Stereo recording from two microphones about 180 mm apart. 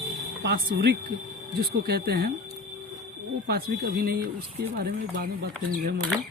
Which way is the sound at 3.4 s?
60° right (ahead or behind).